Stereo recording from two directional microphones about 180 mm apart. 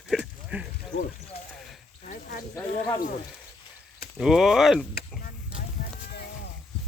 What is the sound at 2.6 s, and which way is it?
Speech, 15° left (ahead or behind).